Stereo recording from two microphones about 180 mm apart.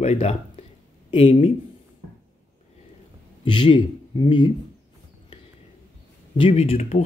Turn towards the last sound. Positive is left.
turn(degrees=35)  # may be behind; listen again after turning